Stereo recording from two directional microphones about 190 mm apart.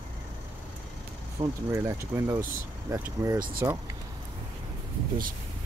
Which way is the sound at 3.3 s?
45° right (ahead or behind).